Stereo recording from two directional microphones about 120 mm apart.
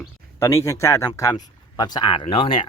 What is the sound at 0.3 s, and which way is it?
Speech, 25° left (ahead or behind).